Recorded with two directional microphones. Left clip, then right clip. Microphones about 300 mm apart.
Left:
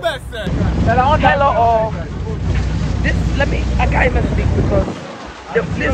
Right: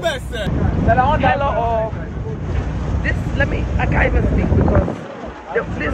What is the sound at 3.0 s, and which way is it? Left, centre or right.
Speech, centre.